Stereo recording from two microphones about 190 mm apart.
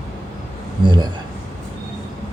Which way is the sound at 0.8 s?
25° right (ahead or behind).